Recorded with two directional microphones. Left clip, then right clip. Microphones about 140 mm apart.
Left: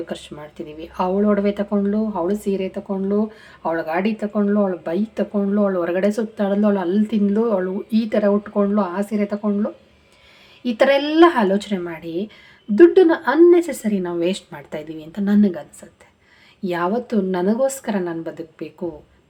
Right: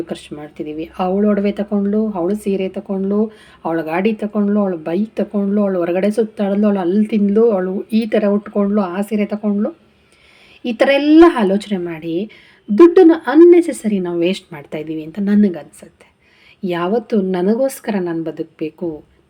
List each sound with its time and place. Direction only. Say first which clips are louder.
0.1 s speech: right 3 dB; 10° right (ahead or behind)
10.6 s speech: right 2 dB; 15° right (ahead or behind)